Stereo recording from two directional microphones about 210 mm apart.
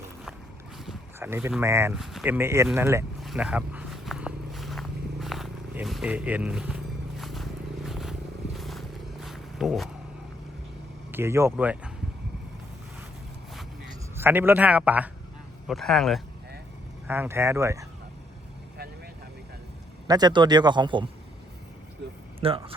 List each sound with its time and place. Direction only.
1.2 s speech: 10° right (ahead or behind)
3.2 s vehicle: centre (ahead or behind)
7.2 s a sound: centre (ahead or behind)
7.9 s vehicle: centre (ahead or behind)
9.2 s purr: centre (ahead or behind)
11.1 s speech: 10° right (ahead or behind)
14.2 s speech: 10° right (ahead or behind)
17.1 s speech: 10° right (ahead or behind)
20.1 s a man's voice: 20° right (ahead or behind)
22.0 s speech: 55° right (ahead or behind)
22.4 s speech: 25° right (ahead or behind)